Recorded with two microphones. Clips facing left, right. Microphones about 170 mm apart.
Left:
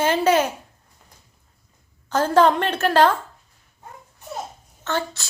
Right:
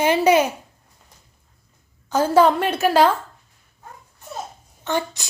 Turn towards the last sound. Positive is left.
turn(degrees=-15)  # may be behind; listen again after turning